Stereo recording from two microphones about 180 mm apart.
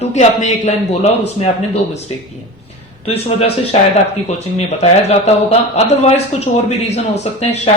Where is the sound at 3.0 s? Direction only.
35° left (ahead or behind).